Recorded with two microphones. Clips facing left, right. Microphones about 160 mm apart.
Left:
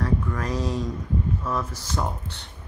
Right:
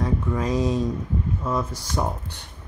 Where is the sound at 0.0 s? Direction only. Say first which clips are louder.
Right 2 dB; 20° right (ahead or behind).